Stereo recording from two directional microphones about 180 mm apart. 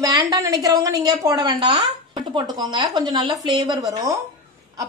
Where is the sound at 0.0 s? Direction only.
20° right (ahead or behind).